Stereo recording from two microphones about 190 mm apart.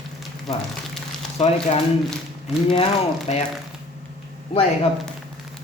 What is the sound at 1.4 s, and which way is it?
Speech, 35° left (ahead or behind).